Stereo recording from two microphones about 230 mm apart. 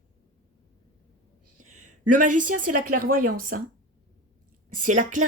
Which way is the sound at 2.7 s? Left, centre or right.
Right.